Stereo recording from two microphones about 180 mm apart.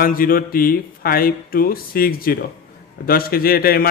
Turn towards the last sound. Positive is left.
turn(degrees=55)  # may be behind; listen again after turning